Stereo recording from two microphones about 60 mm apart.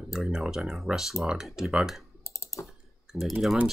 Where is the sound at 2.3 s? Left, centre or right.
Left.